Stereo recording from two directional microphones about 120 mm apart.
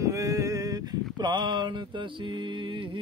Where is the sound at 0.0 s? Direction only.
25° right (ahead or behind).